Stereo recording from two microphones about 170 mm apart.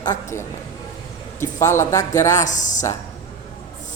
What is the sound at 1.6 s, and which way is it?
Speech, 15° left (ahead or behind).